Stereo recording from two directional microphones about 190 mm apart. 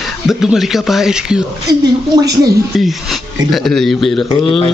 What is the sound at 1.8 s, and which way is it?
Speech, 20° right (ahead or behind).